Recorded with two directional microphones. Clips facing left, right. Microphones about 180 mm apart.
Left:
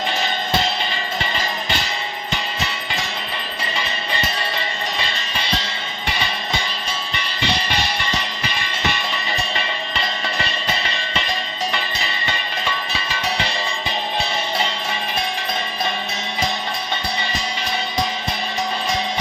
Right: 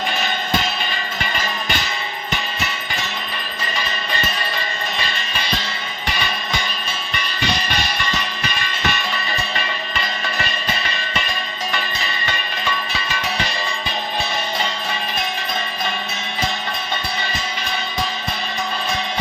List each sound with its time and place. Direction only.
6.1 s music: 25° left (ahead or behind)
9.6 s cowbell: 25° left (ahead or behind)